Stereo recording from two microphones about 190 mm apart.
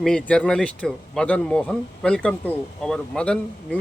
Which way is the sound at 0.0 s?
5° left (ahead or behind).